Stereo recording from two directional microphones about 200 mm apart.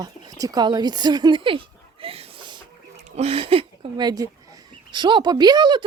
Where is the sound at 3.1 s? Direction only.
30° right (ahead or behind).